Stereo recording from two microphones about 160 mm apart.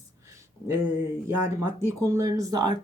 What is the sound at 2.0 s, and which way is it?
Speech, 20° right (ahead or behind).